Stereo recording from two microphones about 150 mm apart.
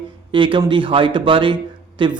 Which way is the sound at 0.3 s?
35° right (ahead or behind).